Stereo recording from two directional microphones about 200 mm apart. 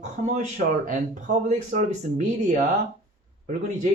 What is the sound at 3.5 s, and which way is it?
Speech, 35° right (ahead or behind).